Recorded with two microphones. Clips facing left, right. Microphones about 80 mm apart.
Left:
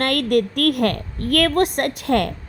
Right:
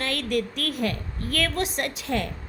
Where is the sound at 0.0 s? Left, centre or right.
Left.